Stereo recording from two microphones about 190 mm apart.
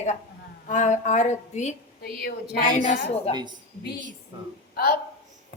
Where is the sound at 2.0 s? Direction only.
55° left (ahead or behind).